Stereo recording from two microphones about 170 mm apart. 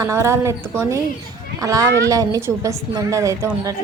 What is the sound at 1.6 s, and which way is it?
A woman's voice, 20° right (ahead or behind).